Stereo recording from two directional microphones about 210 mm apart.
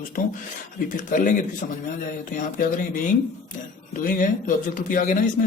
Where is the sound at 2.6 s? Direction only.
40° left (ahead or behind).